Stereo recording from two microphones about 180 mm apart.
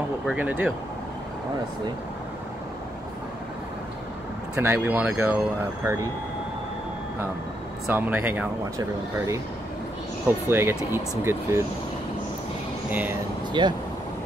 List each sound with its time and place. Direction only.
0.3 s speech: 10° right (ahead or behind)
4.6 s speech: 10° right (ahead or behind)
7.8 s speech: 10° right (ahead or behind)
13.5 s speech: 25° right (ahead or behind)